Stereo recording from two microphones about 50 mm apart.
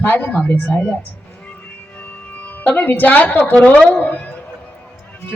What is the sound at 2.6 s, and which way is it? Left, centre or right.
A man's voice, left.